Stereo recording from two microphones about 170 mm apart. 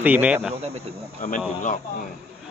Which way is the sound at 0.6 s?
35° right (ahead or behind).